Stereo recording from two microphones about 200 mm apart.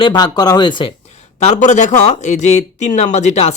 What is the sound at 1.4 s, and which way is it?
Speech, 35° left (ahead or behind).